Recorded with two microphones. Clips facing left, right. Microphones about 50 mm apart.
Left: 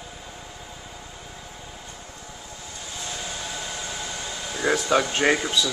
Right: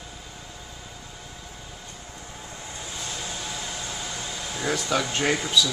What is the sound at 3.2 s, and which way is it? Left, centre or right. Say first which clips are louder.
Hair dryer: left 1 dB; centre.